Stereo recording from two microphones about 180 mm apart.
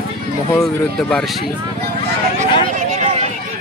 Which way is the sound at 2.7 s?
40° right (ahead or behind).